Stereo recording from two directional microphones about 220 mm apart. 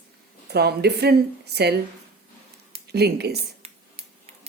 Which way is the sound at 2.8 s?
45° right (ahead or behind).